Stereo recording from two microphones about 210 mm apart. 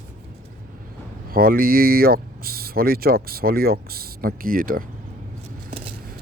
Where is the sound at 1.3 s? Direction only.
45° right (ahead or behind).